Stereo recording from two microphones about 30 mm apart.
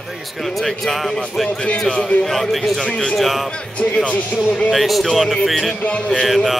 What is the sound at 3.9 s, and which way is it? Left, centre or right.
Speech, left.